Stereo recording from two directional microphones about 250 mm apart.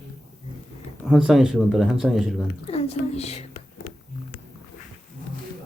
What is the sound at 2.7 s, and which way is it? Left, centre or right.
Speech, left.